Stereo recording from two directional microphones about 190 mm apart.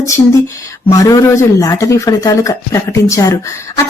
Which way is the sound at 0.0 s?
15° left (ahead or behind).